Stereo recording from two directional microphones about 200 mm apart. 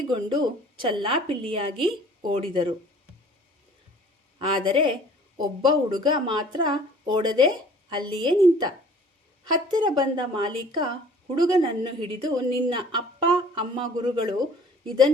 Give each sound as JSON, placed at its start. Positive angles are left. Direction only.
{"t": 0.1, "sound": "a woman's voice", "side_deg": -25}
{"t": 4.4, "sound": "a woman's voice", "side_deg": -25}